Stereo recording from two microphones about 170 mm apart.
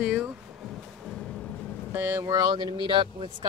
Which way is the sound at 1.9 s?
15° right (ahead or behind).